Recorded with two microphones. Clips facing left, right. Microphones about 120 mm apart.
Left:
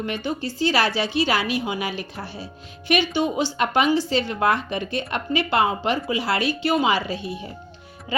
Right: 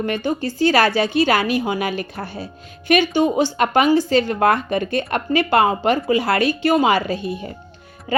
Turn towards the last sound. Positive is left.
turn(degrees=-50)  # may be behind; listen again after turning